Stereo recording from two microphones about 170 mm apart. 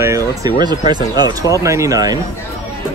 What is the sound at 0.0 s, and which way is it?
Speech, 20° right (ahead or behind).